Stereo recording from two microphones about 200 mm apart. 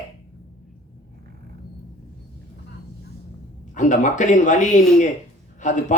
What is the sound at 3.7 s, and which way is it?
A man's voice, 40° left (ahead or behind).